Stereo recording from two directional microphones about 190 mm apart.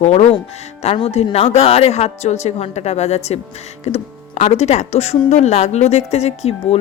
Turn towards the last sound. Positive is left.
turn(degrees=35)  # may be behind; listen again after turning